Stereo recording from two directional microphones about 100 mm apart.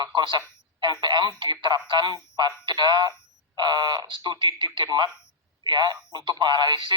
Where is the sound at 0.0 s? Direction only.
50° right (ahead or behind).